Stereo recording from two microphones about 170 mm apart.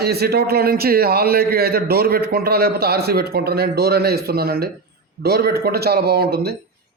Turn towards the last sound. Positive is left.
turn(degrees=-65)  # may be behind; listen again after turning